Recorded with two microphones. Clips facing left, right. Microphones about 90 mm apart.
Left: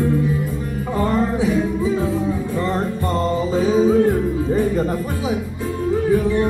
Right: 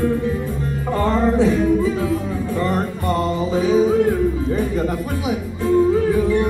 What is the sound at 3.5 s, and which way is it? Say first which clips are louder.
Music: right 1 dB; 35° left (ahead or behind).